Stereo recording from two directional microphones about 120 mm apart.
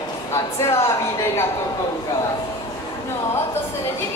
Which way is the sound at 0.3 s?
20° left (ahead or behind).